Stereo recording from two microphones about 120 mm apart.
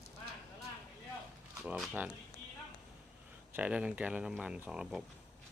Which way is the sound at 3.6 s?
10° right (ahead or behind).